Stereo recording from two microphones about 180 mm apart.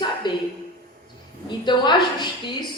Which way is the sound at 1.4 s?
25° left (ahead or behind).